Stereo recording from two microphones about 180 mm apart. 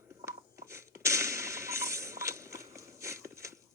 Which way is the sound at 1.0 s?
15° right (ahead or behind).